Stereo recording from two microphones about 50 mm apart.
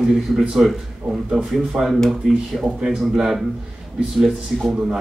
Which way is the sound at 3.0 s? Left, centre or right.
Centre.